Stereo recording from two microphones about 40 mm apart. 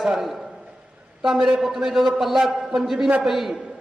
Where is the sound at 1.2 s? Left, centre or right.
Centre.